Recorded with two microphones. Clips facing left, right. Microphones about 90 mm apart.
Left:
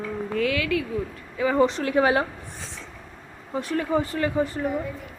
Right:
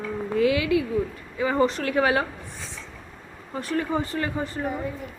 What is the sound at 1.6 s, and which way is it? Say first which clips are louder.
Speech: left 1 dB; 20° left (ahead or behind).